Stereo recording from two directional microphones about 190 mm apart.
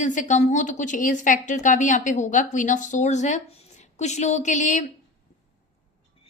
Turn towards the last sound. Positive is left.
turn(degrees=40)  # may be behind; listen again after turning